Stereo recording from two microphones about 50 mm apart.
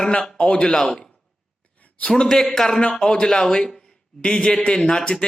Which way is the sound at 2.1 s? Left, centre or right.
Centre.